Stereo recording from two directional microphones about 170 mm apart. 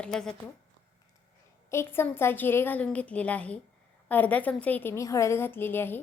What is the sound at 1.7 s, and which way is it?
A woman's voice, 15° left (ahead or behind).